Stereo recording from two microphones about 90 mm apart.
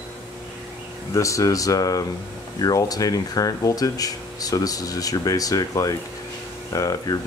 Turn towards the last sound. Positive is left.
turn(degrees=40)  # may be behind; listen again after turning